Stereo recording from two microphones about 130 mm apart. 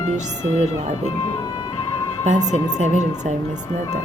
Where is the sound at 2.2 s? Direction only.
65° right (ahead or behind).